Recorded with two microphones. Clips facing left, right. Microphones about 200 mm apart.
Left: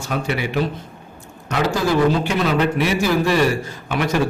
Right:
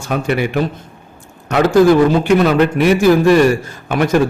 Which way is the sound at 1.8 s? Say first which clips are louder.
Right 7 dB; 50° right (ahead or behind).